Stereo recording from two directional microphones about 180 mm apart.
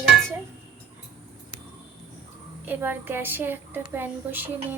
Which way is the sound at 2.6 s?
10° right (ahead or behind).